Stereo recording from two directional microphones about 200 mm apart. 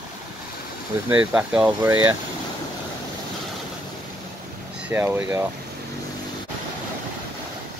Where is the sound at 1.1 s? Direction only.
10° right (ahead or behind).